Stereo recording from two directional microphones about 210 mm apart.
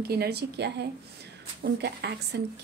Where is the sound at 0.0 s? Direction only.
50° right (ahead or behind).